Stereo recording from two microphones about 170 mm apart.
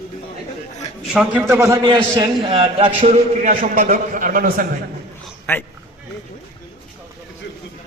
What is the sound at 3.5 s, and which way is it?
A man's voice, 50° right (ahead or behind).